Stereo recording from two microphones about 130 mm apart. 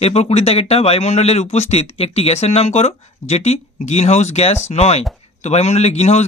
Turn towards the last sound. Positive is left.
turn(degrees=55)  # may be behind; listen again after turning